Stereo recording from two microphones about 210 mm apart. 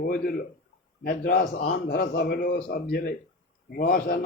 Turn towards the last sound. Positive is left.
turn(degrees=45)  # may be behind; listen again after turning